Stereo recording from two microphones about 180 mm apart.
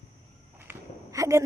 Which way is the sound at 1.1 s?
15° right (ahead or behind).